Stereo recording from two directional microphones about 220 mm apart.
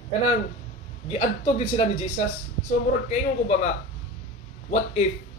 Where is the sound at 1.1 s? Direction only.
30° left (ahead or behind).